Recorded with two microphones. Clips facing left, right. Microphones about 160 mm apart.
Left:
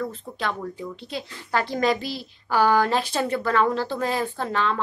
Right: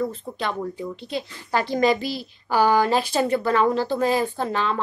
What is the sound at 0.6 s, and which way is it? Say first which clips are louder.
Speech: right 3 dB; 15° right (ahead or behind).